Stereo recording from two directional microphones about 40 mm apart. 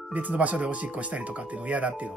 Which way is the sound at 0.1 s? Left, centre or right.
Right.